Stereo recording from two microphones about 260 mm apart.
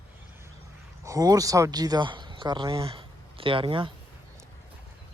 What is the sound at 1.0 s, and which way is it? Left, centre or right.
Speech, centre.